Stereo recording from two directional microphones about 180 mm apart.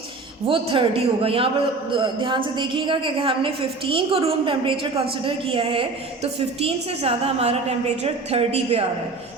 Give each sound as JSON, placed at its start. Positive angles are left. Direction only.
{"t": 0.4, "sound": "a woman's voice", "side_deg": -30}